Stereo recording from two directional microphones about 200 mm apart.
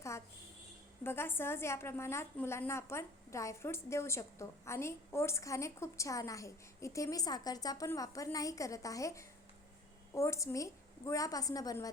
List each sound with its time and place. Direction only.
1.0 s a woman's voice: 10° left (ahead or behind)